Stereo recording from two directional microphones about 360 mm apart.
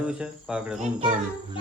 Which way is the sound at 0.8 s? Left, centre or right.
Centre.